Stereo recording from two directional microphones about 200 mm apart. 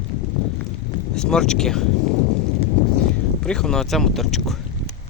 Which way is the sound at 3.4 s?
5° left (ahead or behind).